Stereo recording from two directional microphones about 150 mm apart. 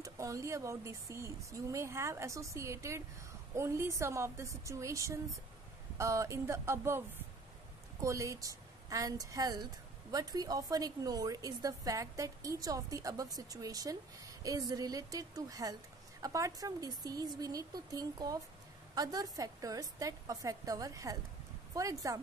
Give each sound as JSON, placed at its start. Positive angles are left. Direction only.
{"t": 0.0, "sound": "a woman's voice", "side_deg": -20}
{"t": 8.0, "sound": "a woman's voice", "side_deg": -20}